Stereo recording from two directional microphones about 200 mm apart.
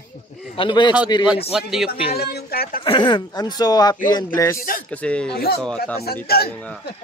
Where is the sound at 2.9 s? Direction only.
25° left (ahead or behind).